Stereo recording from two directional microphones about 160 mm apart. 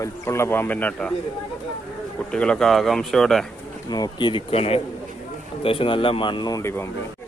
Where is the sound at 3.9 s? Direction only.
25° left (ahead or behind).